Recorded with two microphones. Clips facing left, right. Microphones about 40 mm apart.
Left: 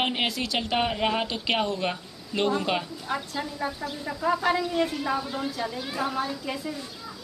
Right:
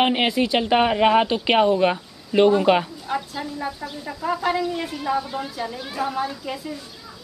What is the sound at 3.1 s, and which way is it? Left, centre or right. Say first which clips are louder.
A woman's voice: right 3 dB; centre.